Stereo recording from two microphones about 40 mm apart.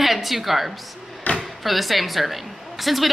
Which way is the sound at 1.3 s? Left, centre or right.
Left.